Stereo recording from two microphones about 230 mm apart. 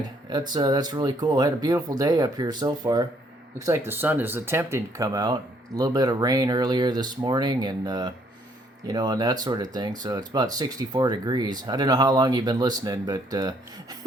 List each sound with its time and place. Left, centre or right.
0.3 s speech: centre